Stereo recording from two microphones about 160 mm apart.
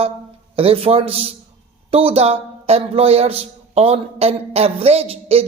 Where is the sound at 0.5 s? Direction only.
35° right (ahead or behind).